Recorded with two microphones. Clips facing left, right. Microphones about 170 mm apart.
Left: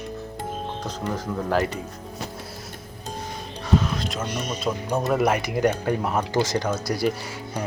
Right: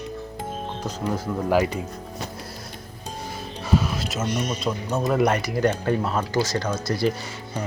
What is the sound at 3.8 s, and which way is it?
Music, 5° right (ahead or behind).